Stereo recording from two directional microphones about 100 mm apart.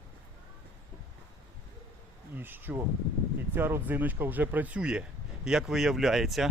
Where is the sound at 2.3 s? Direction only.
20° right (ahead or behind).